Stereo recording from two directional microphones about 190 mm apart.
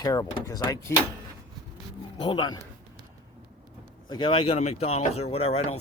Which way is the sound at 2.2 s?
25° left (ahead or behind).